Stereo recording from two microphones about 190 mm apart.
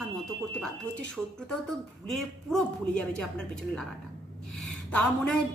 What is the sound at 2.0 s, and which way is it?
A woman's voice, centre (ahead or behind).